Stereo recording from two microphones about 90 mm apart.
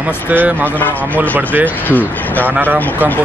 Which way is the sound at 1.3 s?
20° right (ahead or behind).